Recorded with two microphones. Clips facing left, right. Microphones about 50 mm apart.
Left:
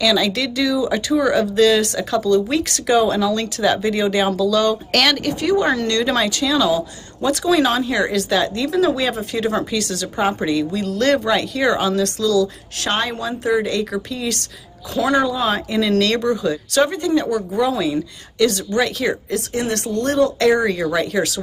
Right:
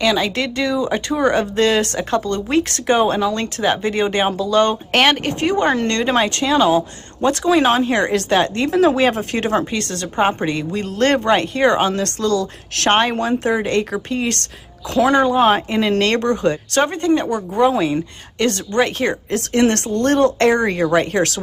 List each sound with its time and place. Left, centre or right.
0.0 s speech: right
1.2 s speech: right
19.5 s speech: right